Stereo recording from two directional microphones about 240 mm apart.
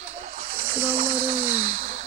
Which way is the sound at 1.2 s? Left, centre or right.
Right.